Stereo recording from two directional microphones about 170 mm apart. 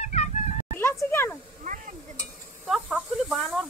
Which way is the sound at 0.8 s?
15° left (ahead or behind).